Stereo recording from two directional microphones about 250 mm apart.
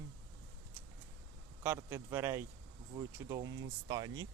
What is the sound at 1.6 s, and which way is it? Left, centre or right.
Speech, centre.